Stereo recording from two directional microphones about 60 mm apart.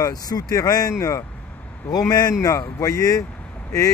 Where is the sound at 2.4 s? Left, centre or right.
Left.